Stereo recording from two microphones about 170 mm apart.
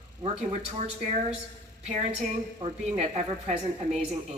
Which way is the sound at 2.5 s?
40° right (ahead or behind).